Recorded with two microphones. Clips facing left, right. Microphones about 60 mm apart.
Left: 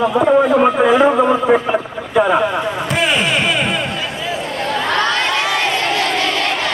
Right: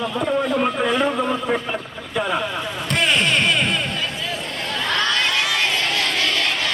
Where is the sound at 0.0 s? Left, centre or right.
Left.